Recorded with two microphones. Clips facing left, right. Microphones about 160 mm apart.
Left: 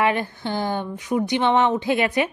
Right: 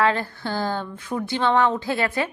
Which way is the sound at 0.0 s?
15° left (ahead or behind).